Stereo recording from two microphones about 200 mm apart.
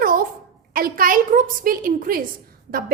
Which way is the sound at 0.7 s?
45° right (ahead or behind).